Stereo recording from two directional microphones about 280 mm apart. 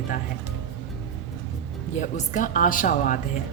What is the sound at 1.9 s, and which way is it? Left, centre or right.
A woman's voice, left.